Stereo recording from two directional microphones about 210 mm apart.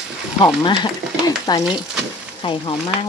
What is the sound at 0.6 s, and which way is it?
Stir, 20° left (ahead or behind).